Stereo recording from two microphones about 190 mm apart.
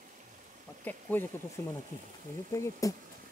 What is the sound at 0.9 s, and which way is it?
Speech, 10° left (ahead or behind).